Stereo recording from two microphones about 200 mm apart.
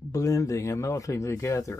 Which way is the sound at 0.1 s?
15° left (ahead or behind).